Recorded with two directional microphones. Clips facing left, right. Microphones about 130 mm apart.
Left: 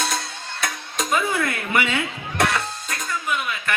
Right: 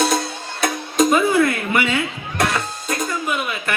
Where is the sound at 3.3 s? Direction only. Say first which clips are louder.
Right 2 dB; 20° right (ahead or behind).